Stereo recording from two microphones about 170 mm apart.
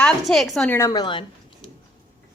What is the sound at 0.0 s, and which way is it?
Speech, centre (ahead or behind).